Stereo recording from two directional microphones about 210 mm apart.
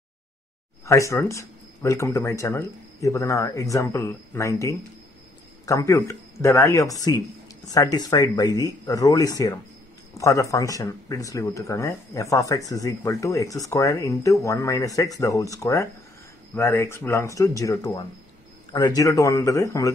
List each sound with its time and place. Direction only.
0.8 s speech: 15° left (ahead or behind)